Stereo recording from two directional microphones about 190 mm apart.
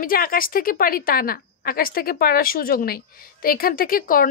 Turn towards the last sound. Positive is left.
turn(degrees=50)  # may be behind; listen again after turning